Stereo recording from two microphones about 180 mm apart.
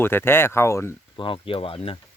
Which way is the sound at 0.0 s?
10° left (ahead or behind).